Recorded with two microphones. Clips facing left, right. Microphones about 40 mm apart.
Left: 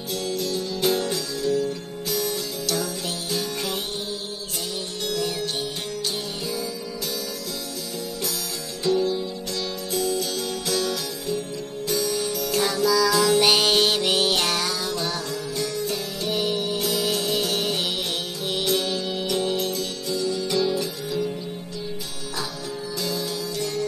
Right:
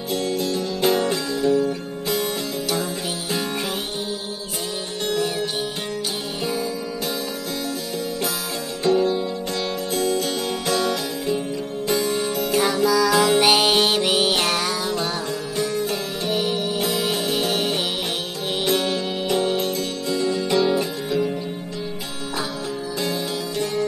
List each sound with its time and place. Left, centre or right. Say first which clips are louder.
0.1 s music: right 4 dB; right
5.0 s music: right 4 dB; right
8.8 s music: right 3 dB; right
10.7 s music: right 4 dB; right
12.4 s music: right 2 dB; right
13.1 s music: right 2 dB; right
13.4 s music: right 2 dB; centre; by 16.0 s right
16.3 s music: right 2 dB; centre
16.7 s music: right 2 dB; right
22.9 s music: right 2 dB; right